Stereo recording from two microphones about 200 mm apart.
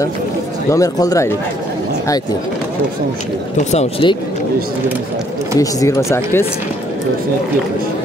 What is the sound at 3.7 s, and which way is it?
Speech, 25° left (ahead or behind).